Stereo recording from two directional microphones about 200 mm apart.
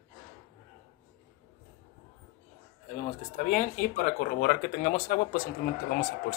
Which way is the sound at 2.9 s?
40° left (ahead or behind).